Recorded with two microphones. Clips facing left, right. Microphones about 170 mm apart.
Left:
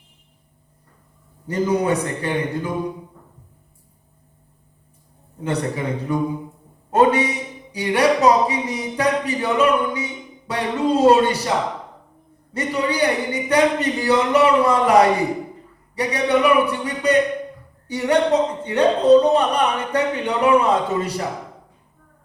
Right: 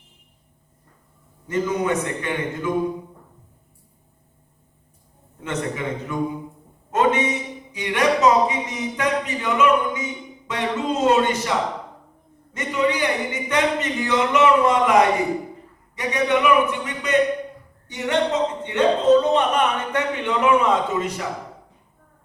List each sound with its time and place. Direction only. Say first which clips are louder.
1.5 s speech: left 3 dB; 35° left (ahead or behind)
5.4 s speech: left 3 dB; 35° left (ahead or behind)
12.5 s speech: left 1 dB; 35° left (ahead or behind)